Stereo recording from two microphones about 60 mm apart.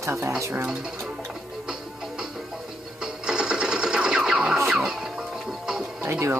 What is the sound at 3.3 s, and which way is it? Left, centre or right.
Sewing machine, centre.